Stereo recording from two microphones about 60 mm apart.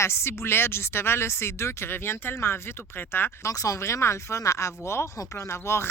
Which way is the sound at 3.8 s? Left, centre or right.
Left.